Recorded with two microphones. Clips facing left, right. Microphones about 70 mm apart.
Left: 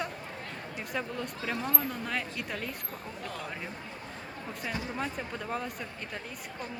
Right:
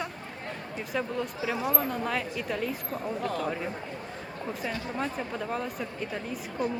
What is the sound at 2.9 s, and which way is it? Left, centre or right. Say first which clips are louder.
Speech: right 9 dB; right.